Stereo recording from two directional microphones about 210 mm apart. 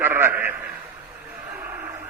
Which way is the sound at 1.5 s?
10° right (ahead or behind).